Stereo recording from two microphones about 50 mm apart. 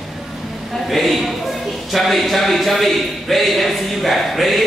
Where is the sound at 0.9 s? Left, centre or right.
Centre.